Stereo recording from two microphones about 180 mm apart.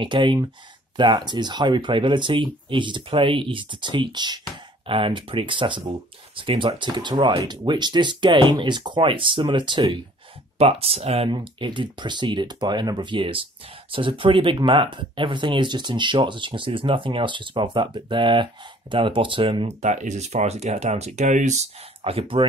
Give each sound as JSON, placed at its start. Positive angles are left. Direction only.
{"t": 0.0, "sound": "speech", "side_deg": -25}